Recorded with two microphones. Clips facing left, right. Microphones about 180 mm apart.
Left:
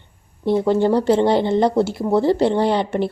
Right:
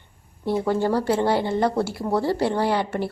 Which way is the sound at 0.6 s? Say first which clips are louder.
Left 5 dB; 20° left (ahead or behind).